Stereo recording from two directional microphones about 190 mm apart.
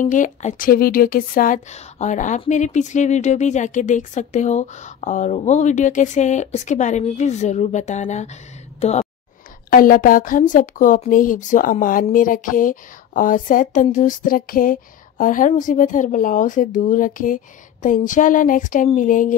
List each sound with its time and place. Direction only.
0.0 s a woman's voice: 40° left (ahead or behind)
9.7 s a woman's voice: 50° left (ahead or behind)